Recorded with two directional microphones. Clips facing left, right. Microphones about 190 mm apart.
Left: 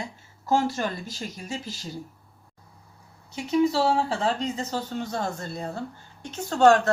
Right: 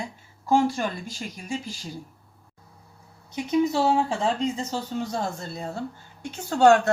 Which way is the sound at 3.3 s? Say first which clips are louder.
Even; 20° right (ahead or behind).